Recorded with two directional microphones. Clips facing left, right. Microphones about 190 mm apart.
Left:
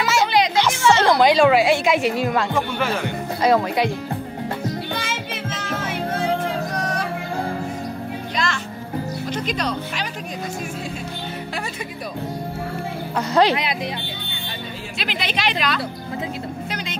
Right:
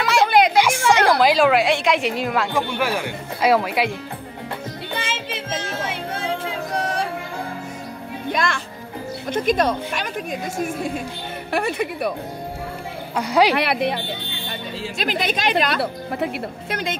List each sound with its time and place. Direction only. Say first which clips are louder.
0.0 s music: right 2 dB; centre (ahead or behind)
0.8 s music: left 3 dB; 15° right (ahead or behind)
1.1 s speech: left 1 dB; centre (ahead or behind)
5.0 s music: even; 30° right (ahead or behind)
8.3 s music: right 4 dB; 55° right (ahead or behind)
9.3 s speech: right 7 dB; 50° right (ahead or behind)
11.5 s speech: right 7 dB; 60° right (ahead or behind)
13.2 s speech: even; 10° right (ahead or behind)
13.6 s speech: right 5 dB; 65° right (ahead or behind)
15.0 s speech: right 3 dB; 45° right (ahead or behind)